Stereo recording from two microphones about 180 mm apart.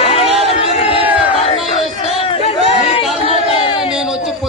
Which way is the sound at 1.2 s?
30° left (ahead or behind).